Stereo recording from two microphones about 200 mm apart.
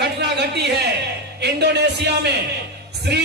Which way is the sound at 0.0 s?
55° right (ahead or behind).